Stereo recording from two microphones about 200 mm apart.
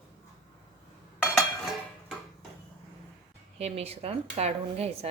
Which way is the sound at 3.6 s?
30° right (ahead or behind).